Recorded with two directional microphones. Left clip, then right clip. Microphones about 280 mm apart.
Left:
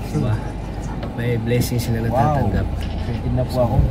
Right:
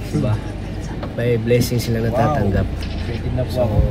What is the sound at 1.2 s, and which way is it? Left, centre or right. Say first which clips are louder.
Speech: right 5 dB; centre.